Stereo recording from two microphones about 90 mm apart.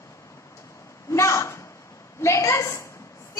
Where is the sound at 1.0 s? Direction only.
35° left (ahead or behind).